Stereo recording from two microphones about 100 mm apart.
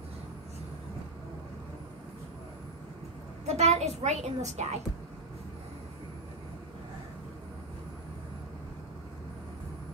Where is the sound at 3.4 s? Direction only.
90° right.